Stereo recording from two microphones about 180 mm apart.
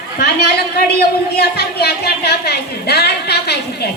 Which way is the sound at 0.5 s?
60° left (ahead or behind).